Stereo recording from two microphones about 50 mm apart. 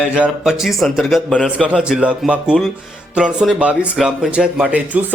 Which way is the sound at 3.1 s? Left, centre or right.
Centre.